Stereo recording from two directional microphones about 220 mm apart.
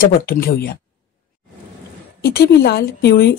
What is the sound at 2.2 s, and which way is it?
Speech, 45° left (ahead or behind).